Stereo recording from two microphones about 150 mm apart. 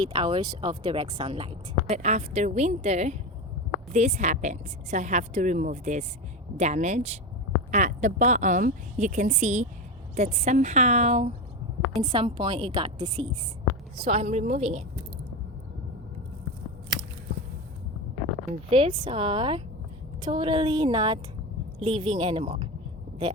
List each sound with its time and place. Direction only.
0.0 s a woman's voice: 35° right (ahead or behind)
18.7 s speech: 35° right (ahead or behind)